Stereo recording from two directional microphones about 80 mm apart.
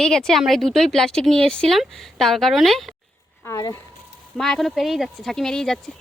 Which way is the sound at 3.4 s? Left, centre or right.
Left.